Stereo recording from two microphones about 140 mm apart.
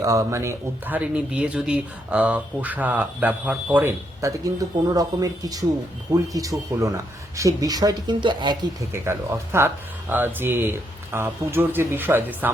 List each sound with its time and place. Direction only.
0.0 s speech: 25° right (ahead or behind)
4.2 s speech: 20° right (ahead or behind)
8.9 s speech: 20° right (ahead or behind)